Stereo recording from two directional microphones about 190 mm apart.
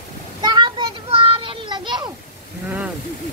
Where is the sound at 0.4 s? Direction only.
25° right (ahead or behind).